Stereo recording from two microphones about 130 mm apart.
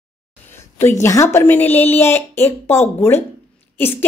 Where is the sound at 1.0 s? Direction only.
20° left (ahead or behind).